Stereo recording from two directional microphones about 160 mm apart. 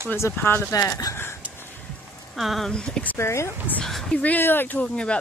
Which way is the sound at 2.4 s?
Centre (ahead or behind).